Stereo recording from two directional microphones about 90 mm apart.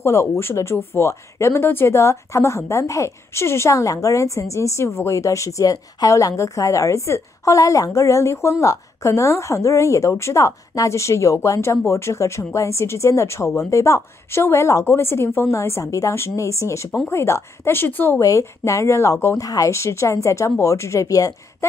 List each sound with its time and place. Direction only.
0.0 s a woman's voice: 30° left (ahead or behind)
18.2 s speech: 35° left (ahead or behind)